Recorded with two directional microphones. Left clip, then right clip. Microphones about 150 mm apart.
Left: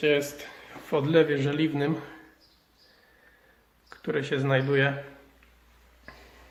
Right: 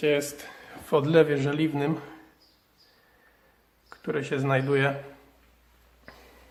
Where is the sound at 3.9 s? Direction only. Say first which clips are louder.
Left 1 dB; 10° right (ahead or behind).